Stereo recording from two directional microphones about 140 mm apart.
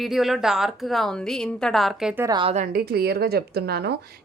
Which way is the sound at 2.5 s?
80° right.